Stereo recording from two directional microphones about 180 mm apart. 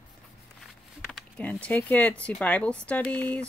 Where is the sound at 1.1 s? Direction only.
5° left (ahead or behind).